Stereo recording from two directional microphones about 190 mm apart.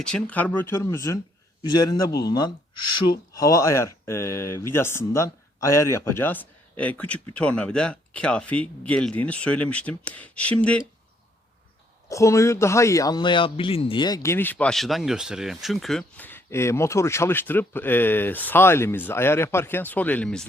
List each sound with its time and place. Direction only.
0.0 s a man's voice: 5° left (ahead or behind)
12.0 s a man's voice: 15° left (ahead or behind)